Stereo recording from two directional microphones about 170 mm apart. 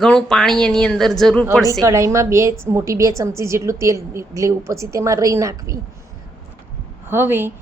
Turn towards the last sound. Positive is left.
turn(degrees=-10)  # may be behind; listen again after turning